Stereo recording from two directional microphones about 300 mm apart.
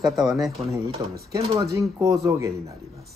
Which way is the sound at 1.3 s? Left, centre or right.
Centre.